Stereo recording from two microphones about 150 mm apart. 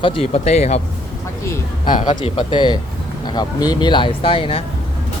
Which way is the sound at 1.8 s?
30° left (ahead or behind).